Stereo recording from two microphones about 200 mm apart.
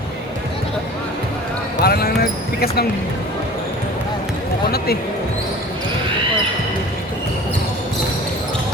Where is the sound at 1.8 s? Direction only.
50° left (ahead or behind).